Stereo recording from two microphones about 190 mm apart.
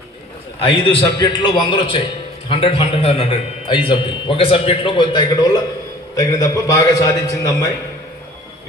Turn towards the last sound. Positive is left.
turn(degrees=20)  # may be behind; listen again after turning